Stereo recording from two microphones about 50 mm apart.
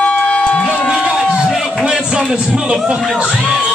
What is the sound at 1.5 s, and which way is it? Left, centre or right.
Speech, centre.